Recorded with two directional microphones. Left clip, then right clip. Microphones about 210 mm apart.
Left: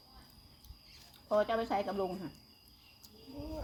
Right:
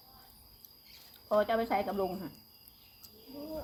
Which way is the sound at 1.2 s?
15° left (ahead or behind).